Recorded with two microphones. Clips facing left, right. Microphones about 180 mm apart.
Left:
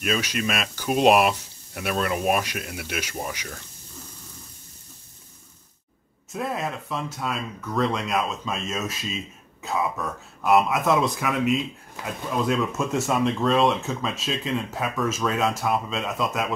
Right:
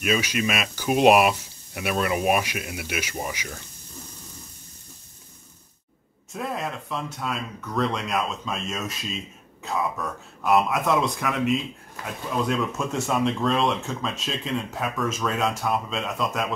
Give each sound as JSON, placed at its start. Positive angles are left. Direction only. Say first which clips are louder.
{"t": 0.0, "sound": "speech", "louder": "right 2 dB", "side_deg": -5}
{"t": 6.3, "sound": "speech", "louder": "left 2 dB", "side_deg": 0}